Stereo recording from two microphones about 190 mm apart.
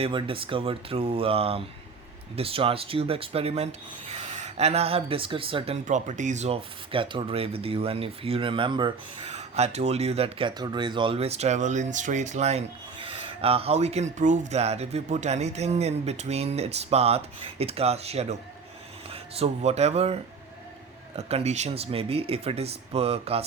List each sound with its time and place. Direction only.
0.0 s speech: 25° right (ahead or behind)
21.2 s speech: 35° right (ahead or behind)